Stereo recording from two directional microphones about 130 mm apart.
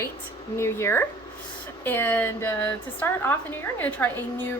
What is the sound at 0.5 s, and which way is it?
A woman's voice, 20° left (ahead or behind).